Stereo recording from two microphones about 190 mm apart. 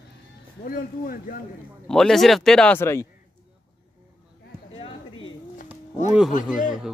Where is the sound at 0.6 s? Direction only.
50° left (ahead or behind).